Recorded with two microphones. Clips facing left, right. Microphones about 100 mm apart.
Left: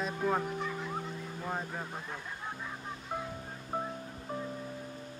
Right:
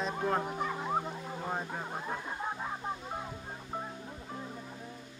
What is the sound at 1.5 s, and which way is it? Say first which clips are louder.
Music: even; 5° right (ahead or behind).